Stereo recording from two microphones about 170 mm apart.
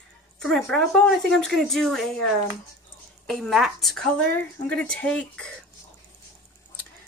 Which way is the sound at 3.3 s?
Centre (ahead or behind).